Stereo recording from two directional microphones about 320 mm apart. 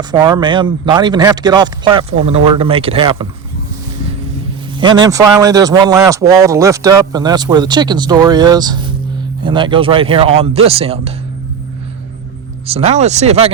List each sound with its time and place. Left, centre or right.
0.0 s speech: centre
4.8 s speech: centre
12.6 s speech: centre